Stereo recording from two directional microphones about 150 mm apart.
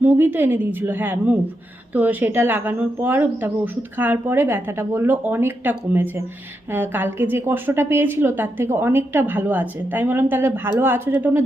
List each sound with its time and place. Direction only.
0.0 s a woman's voice: 15° right (ahead or behind)